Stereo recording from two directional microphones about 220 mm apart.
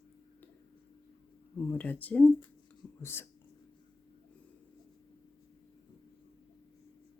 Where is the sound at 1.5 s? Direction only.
5° left (ahead or behind).